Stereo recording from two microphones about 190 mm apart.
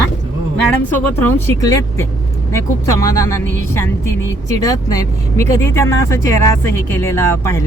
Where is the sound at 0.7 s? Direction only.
10° left (ahead or behind).